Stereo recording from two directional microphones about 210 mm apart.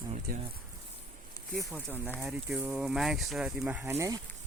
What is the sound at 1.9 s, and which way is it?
Speech, 10° left (ahead or behind).